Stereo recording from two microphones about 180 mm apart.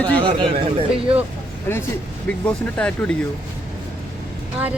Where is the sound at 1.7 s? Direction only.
15° left (ahead or behind).